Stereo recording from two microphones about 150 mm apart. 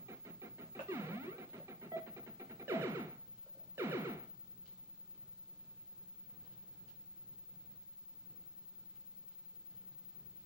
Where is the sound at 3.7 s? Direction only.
20° right (ahead or behind).